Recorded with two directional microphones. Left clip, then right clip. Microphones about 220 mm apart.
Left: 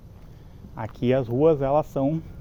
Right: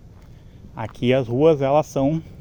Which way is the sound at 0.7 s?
10° right (ahead or behind).